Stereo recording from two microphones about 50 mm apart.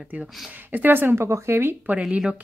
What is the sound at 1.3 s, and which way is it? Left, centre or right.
Speech, right.